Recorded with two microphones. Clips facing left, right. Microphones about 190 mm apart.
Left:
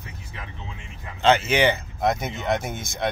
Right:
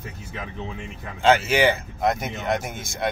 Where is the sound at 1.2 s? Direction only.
5° right (ahead or behind).